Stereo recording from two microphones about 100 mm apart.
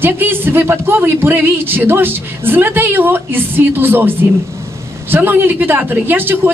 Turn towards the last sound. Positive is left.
turn(degrees=-20)  # may be behind; listen again after turning